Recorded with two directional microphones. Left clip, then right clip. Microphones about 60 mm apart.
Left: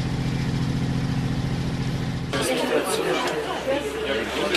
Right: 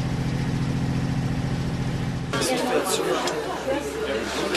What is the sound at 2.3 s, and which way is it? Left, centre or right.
Chatter, right.